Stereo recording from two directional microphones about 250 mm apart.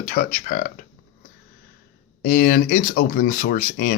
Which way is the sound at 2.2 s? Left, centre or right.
Left.